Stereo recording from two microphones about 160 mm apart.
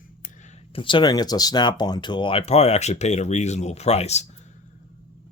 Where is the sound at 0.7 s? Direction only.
30° left (ahead or behind).